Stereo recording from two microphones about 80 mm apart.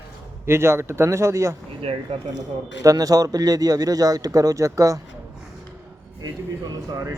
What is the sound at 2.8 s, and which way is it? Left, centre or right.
Speech, right.